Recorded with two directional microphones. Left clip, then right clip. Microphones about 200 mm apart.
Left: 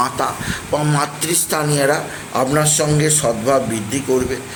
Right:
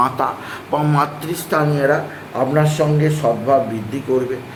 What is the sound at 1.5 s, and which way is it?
A man's voice, 15° left (ahead or behind).